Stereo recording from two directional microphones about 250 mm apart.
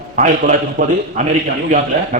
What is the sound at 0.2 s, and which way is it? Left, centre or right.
A man's voice, right.